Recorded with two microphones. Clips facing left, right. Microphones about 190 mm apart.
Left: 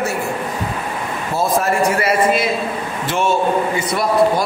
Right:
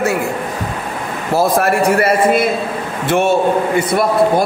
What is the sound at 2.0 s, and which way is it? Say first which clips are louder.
A man's voice: right 3 dB; 55° right (ahead or behind).